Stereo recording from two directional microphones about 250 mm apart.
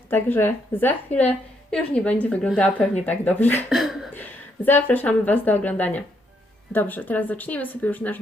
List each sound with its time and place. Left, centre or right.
0.1 s a woman's voice: centre